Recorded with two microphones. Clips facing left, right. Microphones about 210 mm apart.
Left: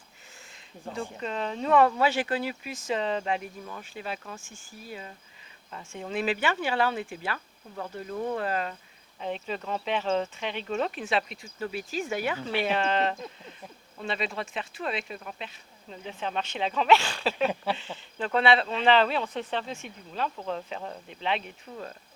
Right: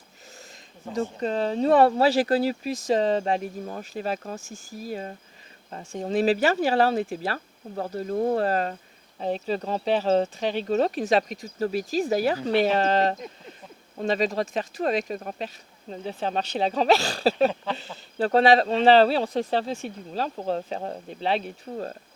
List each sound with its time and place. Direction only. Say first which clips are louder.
1.2 s speech: right 8 dB; 35° right (ahead or behind)